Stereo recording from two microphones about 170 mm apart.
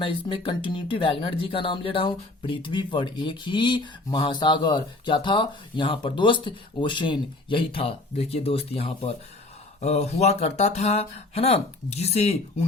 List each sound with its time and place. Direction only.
0.0 s speech: 30° left (ahead or behind)